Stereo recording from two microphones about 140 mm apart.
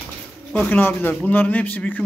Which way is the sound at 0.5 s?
15° left (ahead or behind).